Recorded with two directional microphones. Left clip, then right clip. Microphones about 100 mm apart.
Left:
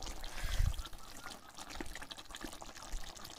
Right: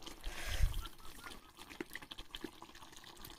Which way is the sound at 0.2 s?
30° right (ahead or behind).